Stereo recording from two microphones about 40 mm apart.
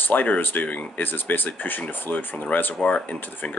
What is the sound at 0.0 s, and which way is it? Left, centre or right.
Speech, left.